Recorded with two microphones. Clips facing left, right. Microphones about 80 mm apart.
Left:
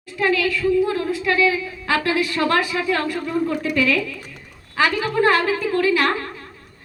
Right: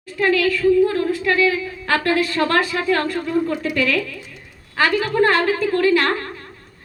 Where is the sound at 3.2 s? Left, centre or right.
Left.